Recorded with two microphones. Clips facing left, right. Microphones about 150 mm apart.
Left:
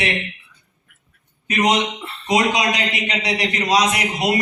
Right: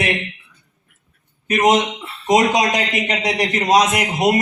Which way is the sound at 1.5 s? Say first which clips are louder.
Right 3 dB; 50° right (ahead or behind).